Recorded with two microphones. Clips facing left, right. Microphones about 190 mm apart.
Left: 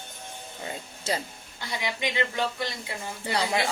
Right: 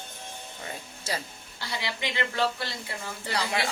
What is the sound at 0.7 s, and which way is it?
Music, 20° left (ahead or behind).